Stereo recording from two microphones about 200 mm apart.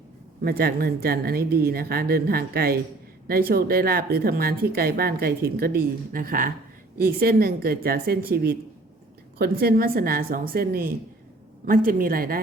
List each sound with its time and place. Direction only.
0.4 s a woman's voice: 50° right (ahead or behind)